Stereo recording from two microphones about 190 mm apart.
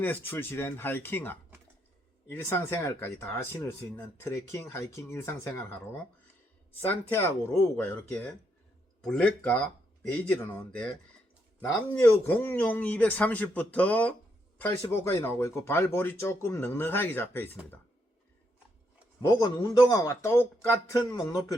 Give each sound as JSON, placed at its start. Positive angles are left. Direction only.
{"t": 0.0, "sound": "speech", "side_deg": 10}
{"t": 2.5, "sound": "speech", "side_deg": 10}
{"t": 6.8, "sound": "speech", "side_deg": 10}
{"t": 11.9, "sound": "speech", "side_deg": 10}
{"t": 19.2, "sound": "a man's voice", "side_deg": 20}